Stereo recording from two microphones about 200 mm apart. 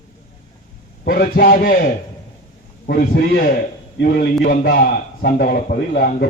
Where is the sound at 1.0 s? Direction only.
45° left (ahead or behind).